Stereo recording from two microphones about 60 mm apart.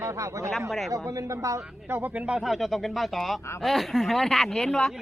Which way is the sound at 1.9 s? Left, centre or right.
Right.